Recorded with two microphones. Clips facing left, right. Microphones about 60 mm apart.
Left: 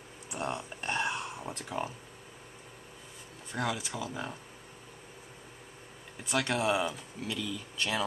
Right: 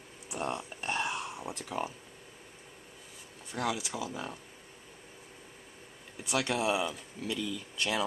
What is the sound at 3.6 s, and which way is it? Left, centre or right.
Speech, centre.